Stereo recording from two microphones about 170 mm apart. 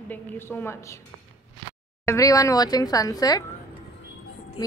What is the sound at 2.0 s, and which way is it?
Speech, 15° left (ahead or behind).